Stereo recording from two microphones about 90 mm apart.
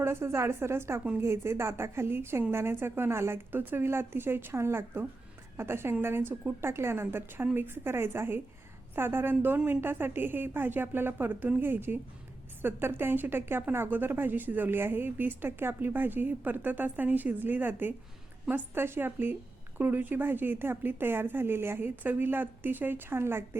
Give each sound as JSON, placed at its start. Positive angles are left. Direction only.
{"t": 0.0, "sound": "speech", "side_deg": -30}